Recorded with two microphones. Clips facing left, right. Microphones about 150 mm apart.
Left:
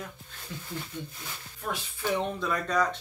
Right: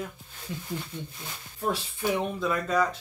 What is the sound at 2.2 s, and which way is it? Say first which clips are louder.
Speech: right 2 dB; centre (ahead or behind).